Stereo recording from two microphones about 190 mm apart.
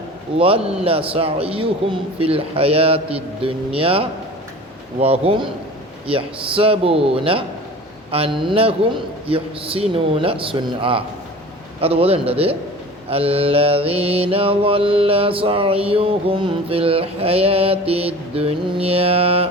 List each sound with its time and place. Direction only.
0.3 s a man's voice: 30° right (ahead or behind)
4.9 s mantra: 30° right (ahead or behind)
6.1 s a man's voice: 30° right (ahead or behind)
11.8 s mantra: 30° right (ahead or behind)